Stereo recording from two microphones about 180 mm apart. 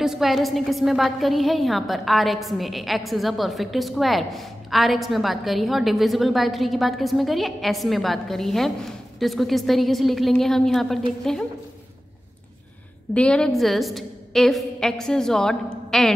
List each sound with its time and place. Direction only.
0.0 s a woman's voice: centre (ahead or behind)
13.1 s a woman's voice: 5° left (ahead or behind)